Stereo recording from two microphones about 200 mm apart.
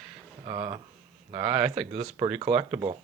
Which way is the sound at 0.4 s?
25° right (ahead or behind).